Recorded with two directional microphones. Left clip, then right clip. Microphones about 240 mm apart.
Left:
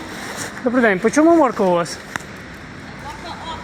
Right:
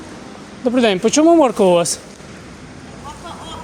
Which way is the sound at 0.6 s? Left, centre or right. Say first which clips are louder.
Right 1 dB; centre.